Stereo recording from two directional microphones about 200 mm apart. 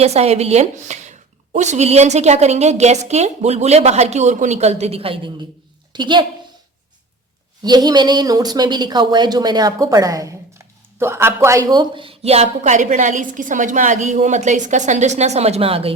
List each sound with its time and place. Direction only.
0.0 s a woman's voice: 30° right (ahead or behind)
7.6 s a woman's voice: 20° right (ahead or behind)